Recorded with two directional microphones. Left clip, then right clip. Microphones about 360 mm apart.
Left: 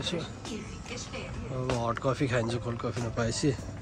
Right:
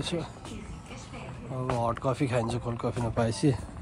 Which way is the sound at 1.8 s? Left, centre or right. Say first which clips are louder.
Right 2 dB; centre.